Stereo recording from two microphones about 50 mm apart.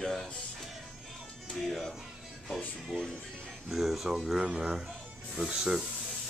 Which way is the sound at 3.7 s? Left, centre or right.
Centre.